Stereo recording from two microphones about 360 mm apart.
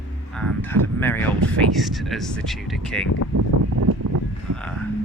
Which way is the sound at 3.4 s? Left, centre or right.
Right.